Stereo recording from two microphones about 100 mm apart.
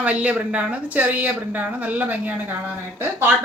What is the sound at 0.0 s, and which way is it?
A woman's voice, 15° right (ahead or behind).